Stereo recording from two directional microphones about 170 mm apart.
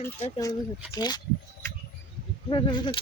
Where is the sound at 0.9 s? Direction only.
25° left (ahead or behind).